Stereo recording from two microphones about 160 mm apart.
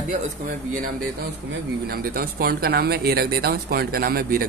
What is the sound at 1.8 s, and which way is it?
Speech, 65° right (ahead or behind).